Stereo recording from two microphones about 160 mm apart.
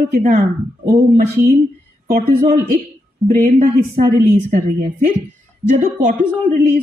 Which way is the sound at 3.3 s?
50° right (ahead or behind).